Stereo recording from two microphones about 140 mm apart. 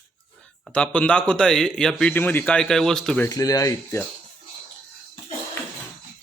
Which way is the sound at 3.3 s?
25° left (ahead or behind).